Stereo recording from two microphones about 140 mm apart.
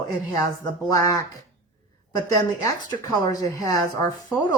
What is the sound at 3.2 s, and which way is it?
Speech, 25° left (ahead or behind).